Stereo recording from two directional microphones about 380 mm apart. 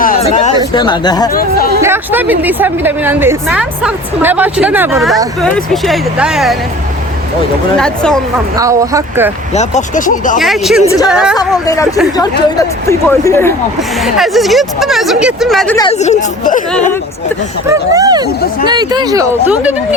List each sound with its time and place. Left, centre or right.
0.0 s a sound: centre
1.3 s speech: left
1.8 s a woman's voice: centre
7.8 s a woman's voice: centre
8.5 s speech: centre
9.6 s speech: centre
10.3 s a woman's voice: centre
11.1 s a woman's voice: centre
11.3 s a woman's voice: centre
17.7 s speech: centre